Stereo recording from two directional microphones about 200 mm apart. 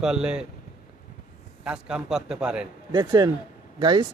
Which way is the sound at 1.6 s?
5° right (ahead or behind).